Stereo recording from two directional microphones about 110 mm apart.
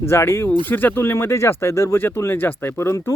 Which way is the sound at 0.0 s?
25° left (ahead or behind).